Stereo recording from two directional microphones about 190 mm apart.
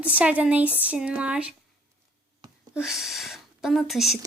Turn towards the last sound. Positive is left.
turn(degrees=0)  # may be behind; listen again after turning